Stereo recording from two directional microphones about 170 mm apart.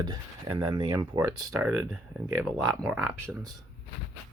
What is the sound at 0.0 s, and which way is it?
Speech, 20° right (ahead or behind).